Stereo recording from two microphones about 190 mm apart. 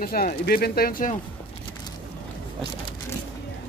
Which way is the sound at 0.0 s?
50° left (ahead or behind).